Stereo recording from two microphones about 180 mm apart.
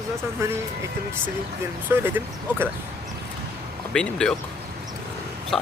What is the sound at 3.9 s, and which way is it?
Speech, 5° left (ahead or behind).